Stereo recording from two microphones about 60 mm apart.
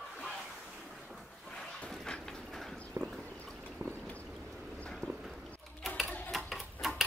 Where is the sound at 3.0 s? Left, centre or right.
Right.